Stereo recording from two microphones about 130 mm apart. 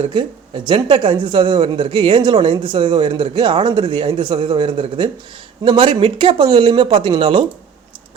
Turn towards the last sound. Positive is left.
turn(degrees=-40)  # may be behind; listen again after turning